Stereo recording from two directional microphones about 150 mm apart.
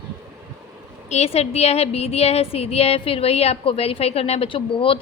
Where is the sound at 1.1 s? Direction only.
45° left (ahead or behind).